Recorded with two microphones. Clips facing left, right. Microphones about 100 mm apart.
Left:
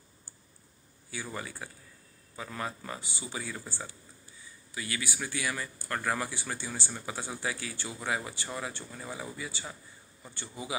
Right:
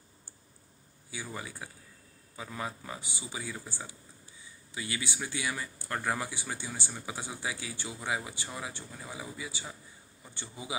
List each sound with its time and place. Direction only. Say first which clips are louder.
1.1 s speech: left 2 dB; 15° right (ahead or behind)